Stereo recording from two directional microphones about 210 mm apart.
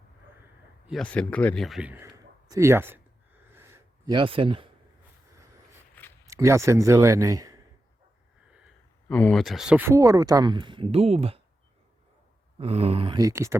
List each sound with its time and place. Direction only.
0.9 s a man's voice: 5° left (ahead or behind)
3.5 s gasp: 10° right (ahead or behind)
5.9 s zipper: 10° left (ahead or behind)
6.2 s speech: 15° right (ahead or behind)
9.0 s speech: 5° left (ahead or behind); by 11.3 s 30° right (ahead or behind)
12.5 s speech: 30° right (ahead or behind); by 13.6 s 15° right (ahead or behind)